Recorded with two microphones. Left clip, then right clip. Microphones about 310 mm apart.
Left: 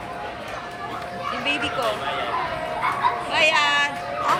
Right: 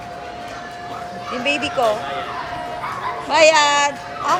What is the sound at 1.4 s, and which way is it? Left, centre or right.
Speech, right.